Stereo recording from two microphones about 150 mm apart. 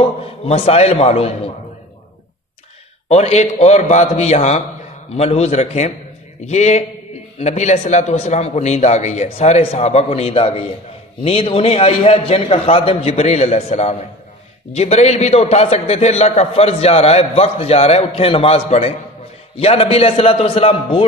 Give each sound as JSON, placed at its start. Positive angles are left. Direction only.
{"t": 0.0, "sound": "a man's voice", "side_deg": 40}
{"t": 3.1, "sound": "a man's voice", "side_deg": 45}